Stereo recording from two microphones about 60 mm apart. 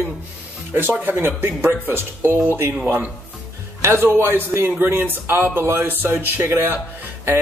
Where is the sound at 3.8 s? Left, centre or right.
Right.